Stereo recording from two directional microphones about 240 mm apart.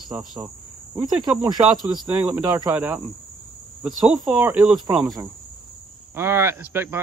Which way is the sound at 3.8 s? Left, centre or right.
Centre.